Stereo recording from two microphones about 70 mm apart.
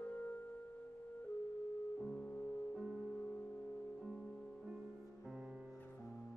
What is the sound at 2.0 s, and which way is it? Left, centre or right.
Music, centre.